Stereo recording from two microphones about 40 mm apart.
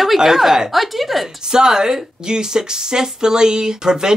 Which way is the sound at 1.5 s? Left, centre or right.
Centre.